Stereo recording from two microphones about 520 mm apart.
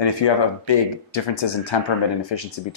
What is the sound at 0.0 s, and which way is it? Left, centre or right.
Speech, left.